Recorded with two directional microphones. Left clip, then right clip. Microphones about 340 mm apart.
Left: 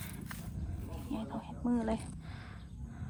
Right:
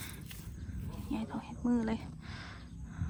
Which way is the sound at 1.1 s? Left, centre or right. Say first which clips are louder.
Right 1 dB; centre.